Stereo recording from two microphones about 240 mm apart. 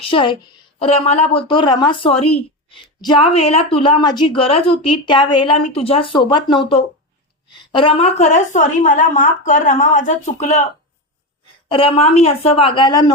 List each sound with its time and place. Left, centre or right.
0.0 s a woman's voice: left
11.7 s a woman's voice: left